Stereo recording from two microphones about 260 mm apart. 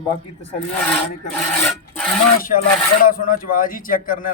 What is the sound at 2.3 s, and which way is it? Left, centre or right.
A man's voice, left.